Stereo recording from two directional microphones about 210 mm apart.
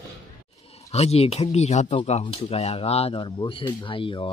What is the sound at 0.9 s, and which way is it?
Speech, 30° left (ahead or behind).